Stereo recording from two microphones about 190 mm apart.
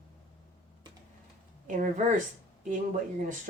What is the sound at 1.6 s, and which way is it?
Speech, 45° right (ahead or behind).